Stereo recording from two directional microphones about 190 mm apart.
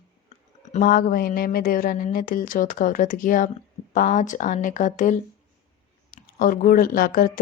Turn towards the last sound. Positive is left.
turn(degrees=45)  # may be behind; listen again after turning